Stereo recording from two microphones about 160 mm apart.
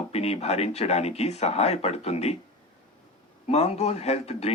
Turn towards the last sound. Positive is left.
turn(degrees=40)  # may be behind; listen again after turning